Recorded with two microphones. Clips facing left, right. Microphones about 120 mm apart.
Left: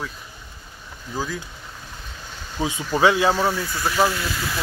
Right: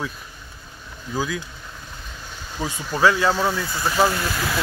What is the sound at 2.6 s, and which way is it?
Speech, 20° left (ahead or behind).